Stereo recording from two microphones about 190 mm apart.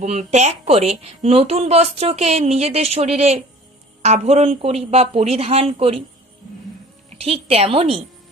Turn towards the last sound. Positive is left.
turn(degrees=-30)  # may be behind; listen again after turning